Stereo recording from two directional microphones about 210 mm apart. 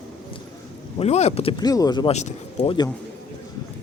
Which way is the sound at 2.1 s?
30° left (ahead or behind).